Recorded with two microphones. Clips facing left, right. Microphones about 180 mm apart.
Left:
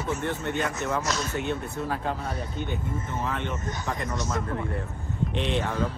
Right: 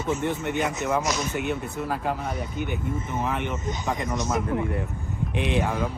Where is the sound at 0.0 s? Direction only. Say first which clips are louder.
Right 3 dB; 20° right (ahead or behind).